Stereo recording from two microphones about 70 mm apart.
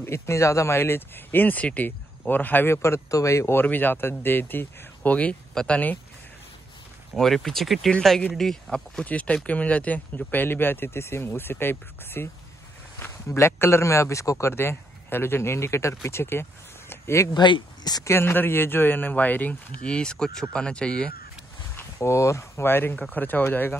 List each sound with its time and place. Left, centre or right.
0.0 s speech: left
3.5 s speech: left
5.5 s speech: centre
7.2 s speech: centre
9.0 s speech: centre; by 17.3 s left
17.3 s speech: left
18.0 s speech: left; by 21.1 s centre
21.9 s speech: left